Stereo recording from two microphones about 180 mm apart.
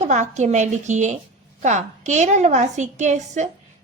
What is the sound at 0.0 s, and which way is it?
A woman's voice, 40° right (ahead or behind).